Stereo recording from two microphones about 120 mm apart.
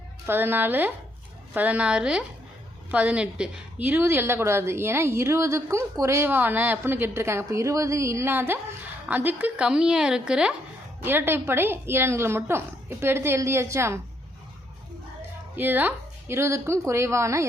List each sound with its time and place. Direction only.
0.3 s a woman's voice: 15° right (ahead or behind)
11.0 s a woman's voice: 20° right (ahead or behind)
15.5 s a woman's voice: 15° right (ahead or behind)